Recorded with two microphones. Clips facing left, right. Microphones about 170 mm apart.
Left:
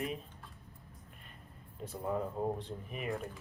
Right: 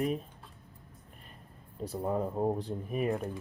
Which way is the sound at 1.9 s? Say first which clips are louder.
Right 4 dB; 35° right (ahead or behind).